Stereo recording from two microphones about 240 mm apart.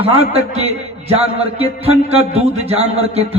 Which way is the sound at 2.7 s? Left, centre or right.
Right.